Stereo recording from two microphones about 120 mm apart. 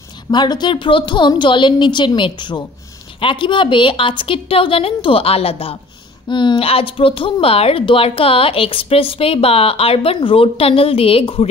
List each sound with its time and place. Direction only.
0.3 s a woman's voice: 35° left (ahead or behind)
6.2 s a woman's voice: 40° left (ahead or behind)